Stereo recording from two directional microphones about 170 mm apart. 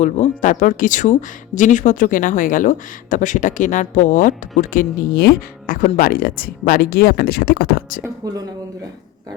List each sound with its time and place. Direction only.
0.0 s speech: 45° left (ahead or behind)
8.2 s speech: 20° right (ahead or behind)